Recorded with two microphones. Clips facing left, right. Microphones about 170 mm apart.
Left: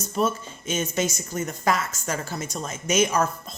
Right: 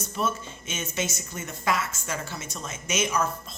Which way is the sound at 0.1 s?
40° left (ahead or behind).